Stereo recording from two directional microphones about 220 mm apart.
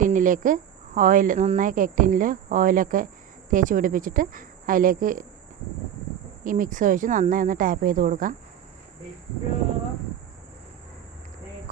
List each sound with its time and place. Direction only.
0.0 s speech: 35° right (ahead or behind)
6.4 s speech: 35° right (ahead or behind)